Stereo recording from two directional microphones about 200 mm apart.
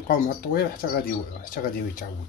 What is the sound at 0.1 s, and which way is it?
Speech, 45° left (ahead or behind).